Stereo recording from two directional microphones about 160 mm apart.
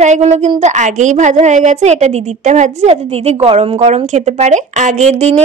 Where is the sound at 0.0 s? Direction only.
45° right (ahead or behind).